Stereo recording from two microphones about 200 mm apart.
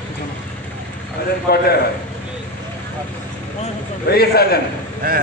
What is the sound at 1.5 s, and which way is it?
Speech, 50° left (ahead or behind).